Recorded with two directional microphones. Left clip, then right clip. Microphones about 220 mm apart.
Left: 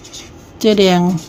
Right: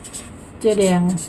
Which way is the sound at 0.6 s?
45° left (ahead or behind).